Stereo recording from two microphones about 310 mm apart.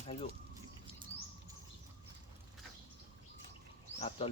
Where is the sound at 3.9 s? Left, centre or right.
Centre.